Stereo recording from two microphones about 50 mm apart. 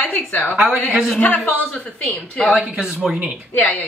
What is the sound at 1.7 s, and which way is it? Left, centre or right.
Speech, centre.